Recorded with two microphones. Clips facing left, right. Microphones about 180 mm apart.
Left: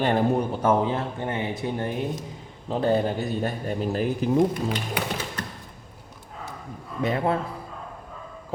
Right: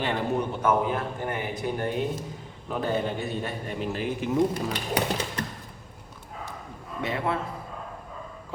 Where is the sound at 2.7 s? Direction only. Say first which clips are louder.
Left 5 dB; 35° left (ahead or behind).